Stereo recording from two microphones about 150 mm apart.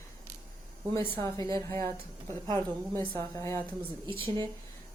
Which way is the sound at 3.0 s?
20° left (ahead or behind).